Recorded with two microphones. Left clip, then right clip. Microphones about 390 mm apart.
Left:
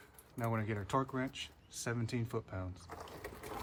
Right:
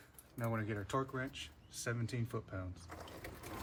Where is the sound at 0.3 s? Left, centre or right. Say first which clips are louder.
Left 2 dB; centre.